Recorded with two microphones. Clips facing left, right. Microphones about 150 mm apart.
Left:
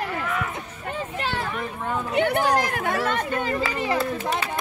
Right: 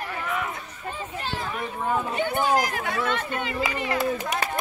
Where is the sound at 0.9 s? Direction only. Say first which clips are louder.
Left 3 dB; 70° left (ahead or behind); by 3.7 s 40° left (ahead or behind).